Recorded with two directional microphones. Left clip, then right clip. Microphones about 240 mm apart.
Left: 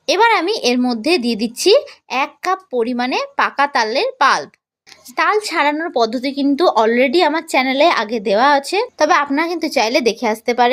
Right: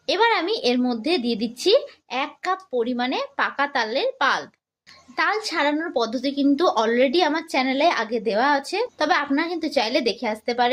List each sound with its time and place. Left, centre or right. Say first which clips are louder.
0.0 s a woman's voice: left 7 dB; left